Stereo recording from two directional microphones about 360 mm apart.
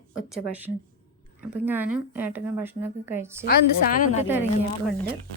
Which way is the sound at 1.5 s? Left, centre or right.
Centre.